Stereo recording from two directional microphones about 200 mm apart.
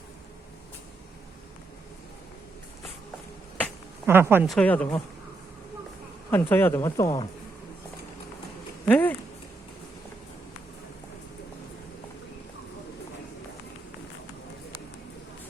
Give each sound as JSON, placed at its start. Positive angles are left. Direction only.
{"t": 4.0, "sound": "speech", "side_deg": -10}
{"t": 4.4, "sound": "speech", "side_deg": 5}
{"t": 6.3, "sound": "speech", "side_deg": 10}
{"t": 8.9, "sound": "speech", "side_deg": 10}